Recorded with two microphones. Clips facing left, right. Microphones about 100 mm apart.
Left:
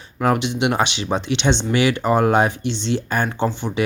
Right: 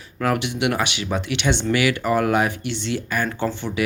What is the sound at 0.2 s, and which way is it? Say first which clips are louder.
Speech: left 3 dB; 25° left (ahead or behind).